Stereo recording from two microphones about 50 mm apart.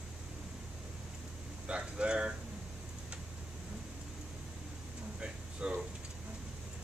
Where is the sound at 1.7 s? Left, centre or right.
Right.